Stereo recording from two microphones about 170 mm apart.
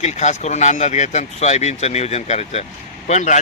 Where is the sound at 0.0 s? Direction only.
40° left (ahead or behind).